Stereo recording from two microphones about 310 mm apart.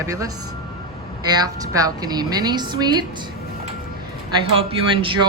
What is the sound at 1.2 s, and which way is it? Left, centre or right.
A woman's voice, centre.